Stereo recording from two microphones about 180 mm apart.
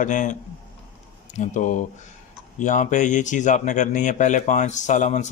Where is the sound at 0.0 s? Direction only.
45° left (ahead or behind).